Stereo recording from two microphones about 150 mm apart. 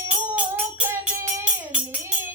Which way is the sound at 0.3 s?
10° right (ahead or behind).